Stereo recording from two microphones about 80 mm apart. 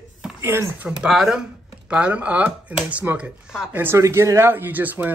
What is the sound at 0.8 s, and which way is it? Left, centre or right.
Speech, centre.